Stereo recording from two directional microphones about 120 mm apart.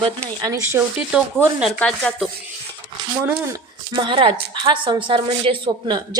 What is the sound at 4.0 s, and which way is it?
A woman's voice, 45° right (ahead or behind).